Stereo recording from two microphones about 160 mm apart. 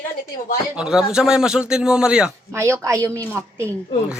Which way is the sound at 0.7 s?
5° right (ahead or behind).